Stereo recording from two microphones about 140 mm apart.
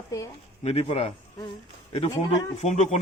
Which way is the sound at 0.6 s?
45° left (ahead or behind).